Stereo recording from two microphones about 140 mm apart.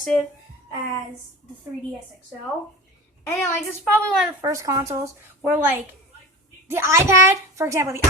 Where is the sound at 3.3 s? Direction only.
15° left (ahead or behind).